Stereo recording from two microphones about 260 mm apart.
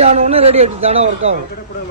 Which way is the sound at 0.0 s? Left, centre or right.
Right.